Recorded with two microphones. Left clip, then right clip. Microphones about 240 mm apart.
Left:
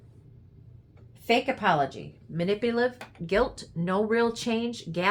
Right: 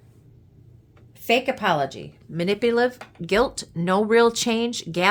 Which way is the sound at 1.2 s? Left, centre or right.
Right.